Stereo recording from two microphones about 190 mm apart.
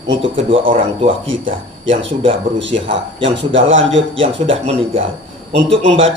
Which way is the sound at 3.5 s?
85° right.